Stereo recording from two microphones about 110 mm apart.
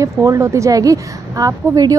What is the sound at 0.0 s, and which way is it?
A woman's voice, 30° right (ahead or behind).